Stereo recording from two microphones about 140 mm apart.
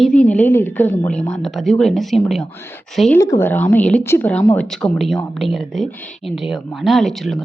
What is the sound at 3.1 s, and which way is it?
A woman's voice, 20° left (ahead or behind).